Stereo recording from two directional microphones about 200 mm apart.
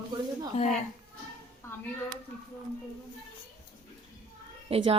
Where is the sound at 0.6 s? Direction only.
35° left (ahead or behind).